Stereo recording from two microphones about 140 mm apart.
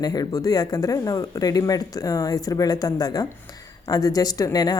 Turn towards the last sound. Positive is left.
turn(degrees=30)  # may be behind; listen again after turning